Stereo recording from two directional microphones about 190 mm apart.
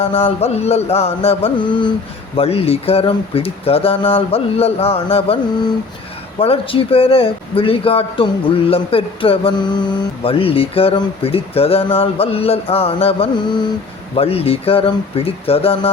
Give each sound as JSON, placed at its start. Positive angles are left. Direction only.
{"t": 0.0, "sound": "speech", "side_deg": 30}
{"t": 6.4, "sound": "a man's voice", "side_deg": 30}